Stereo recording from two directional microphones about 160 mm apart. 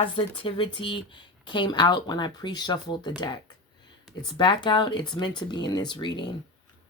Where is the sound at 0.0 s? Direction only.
35° left (ahead or behind).